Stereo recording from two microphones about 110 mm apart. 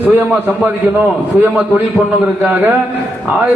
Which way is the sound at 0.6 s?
15° right (ahead or behind).